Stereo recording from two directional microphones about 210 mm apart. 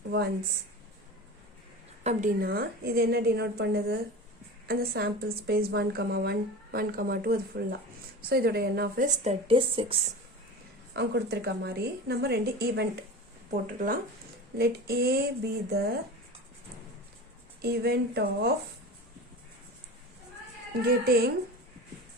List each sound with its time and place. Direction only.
2.0 s a woman's voice: 40° right (ahead or behind)
9.2 s speech: 25° right (ahead or behind)
10.9 s a woman's voice: 50° right (ahead or behind)
17.6 s a woman's voice: 50° right (ahead or behind)
20.8 s a woman's voice: 45° right (ahead or behind)